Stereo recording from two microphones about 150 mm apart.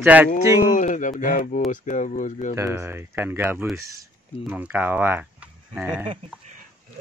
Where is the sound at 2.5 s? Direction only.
20° right (ahead or behind).